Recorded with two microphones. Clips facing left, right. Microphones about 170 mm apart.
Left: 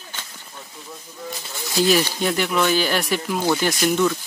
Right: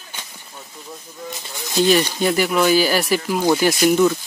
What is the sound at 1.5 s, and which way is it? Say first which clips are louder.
Speech: right 2 dB; 20° right (ahead or behind).